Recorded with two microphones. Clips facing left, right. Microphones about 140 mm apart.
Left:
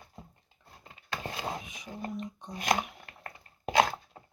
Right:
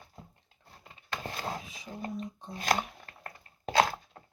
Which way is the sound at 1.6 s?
30° right (ahead or behind).